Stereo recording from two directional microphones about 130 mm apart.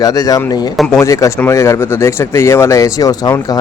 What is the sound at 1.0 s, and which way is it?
Speech, 25° left (ahead or behind).